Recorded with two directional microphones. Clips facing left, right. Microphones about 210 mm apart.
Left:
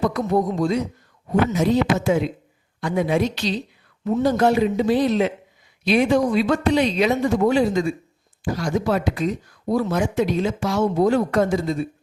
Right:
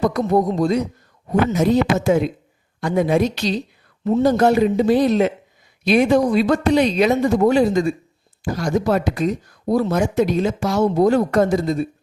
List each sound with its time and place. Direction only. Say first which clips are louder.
0.0 s speech: right 3 dB; 40° right (ahead or behind)